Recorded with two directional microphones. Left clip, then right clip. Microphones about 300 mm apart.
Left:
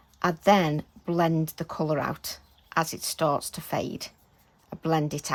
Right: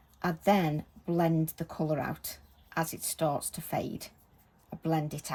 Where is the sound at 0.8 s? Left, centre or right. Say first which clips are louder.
Left 4 dB; left.